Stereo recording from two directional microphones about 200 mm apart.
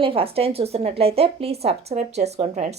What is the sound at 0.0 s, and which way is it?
A woman's voice, 25° right (ahead or behind).